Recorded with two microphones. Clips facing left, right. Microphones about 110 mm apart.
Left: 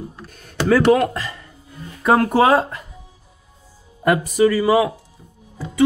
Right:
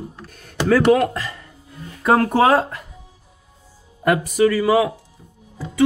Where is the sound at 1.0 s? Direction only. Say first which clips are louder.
Even; 5° left (ahead or behind).